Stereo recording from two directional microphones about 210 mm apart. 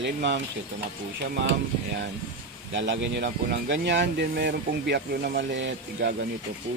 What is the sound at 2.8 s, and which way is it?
Speech, 55° right (ahead or behind).